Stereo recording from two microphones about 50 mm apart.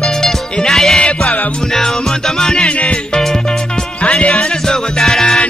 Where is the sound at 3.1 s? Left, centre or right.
Centre.